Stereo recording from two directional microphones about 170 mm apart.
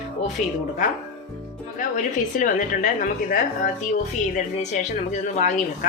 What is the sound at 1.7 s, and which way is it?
A woman's voice, 50° left (ahead or behind).